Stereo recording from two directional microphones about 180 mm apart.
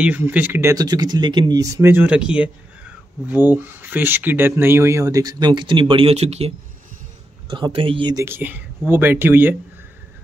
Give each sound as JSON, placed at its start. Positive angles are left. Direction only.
{"t": 0.0, "sound": "speech", "side_deg": -10}